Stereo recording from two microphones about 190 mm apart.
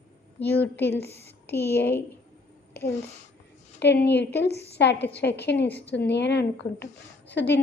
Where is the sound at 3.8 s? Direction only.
65° left (ahead or behind).